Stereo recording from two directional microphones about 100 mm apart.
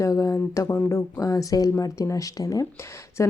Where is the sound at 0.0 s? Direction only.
35° left (ahead or behind).